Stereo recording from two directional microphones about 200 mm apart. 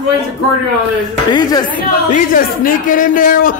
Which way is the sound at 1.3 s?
20° left (ahead or behind).